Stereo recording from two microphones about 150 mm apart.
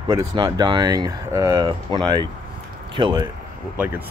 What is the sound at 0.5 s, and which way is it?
Speech, 30° right (ahead or behind).